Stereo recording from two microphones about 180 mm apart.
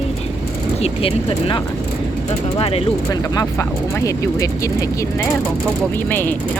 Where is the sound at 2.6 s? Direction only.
35° left (ahead or behind).